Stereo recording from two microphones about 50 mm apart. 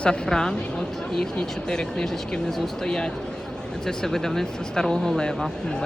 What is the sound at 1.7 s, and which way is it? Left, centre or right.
Speech, centre.